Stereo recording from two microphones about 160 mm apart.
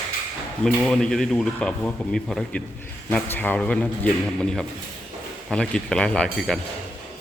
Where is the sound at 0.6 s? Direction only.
5° left (ahead or behind).